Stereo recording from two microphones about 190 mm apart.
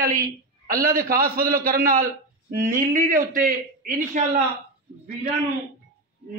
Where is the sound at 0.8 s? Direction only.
50° right (ahead or behind).